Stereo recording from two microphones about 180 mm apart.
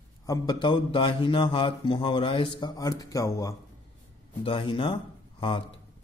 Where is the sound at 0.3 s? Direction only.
25° left (ahead or behind).